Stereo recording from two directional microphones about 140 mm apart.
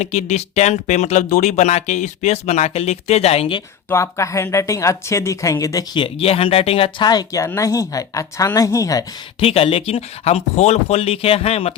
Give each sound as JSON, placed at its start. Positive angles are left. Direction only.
{"t": 0.0, "sound": "speech", "side_deg": 50}
{"t": 3.8, "sound": "speech", "side_deg": 20}
{"t": 7.1, "sound": "speech", "side_deg": 25}
{"t": 9.4, "sound": "speech", "side_deg": 40}